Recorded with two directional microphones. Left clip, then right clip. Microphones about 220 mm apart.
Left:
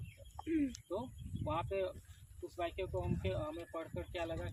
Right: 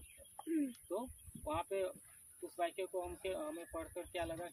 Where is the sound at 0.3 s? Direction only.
30° left (ahead or behind).